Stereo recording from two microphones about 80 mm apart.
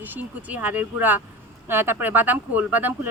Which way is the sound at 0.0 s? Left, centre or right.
Right.